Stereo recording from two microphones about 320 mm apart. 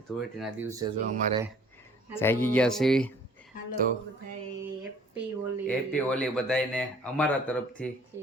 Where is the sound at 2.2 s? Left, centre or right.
Centre.